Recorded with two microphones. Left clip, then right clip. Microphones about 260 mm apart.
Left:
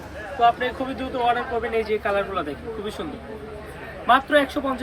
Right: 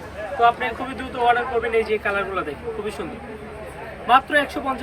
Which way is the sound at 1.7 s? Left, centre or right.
Centre.